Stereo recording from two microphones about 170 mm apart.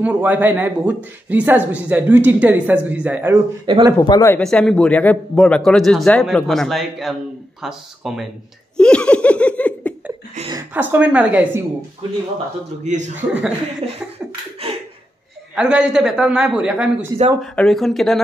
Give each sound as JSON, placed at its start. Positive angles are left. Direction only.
{"t": 0.0, "sound": "speech", "side_deg": -10}
{"t": 3.6, "sound": "a man's voice", "side_deg": -30}
{"t": 4.0, "sound": "speech", "side_deg": 20}
{"t": 4.4, "sound": "speech", "side_deg": 5}
{"t": 8.7, "sound": "laughter", "side_deg": 5}
{"t": 10.7, "sound": "speech", "side_deg": -10}
{"t": 12.8, "sound": "a man's voice", "side_deg": -45}
{"t": 13.1, "sound": "speech", "side_deg": -5}
{"t": 13.8, "sound": "beatboxing", "side_deg": -40}
{"t": 15.5, "sound": "speech", "side_deg": -5}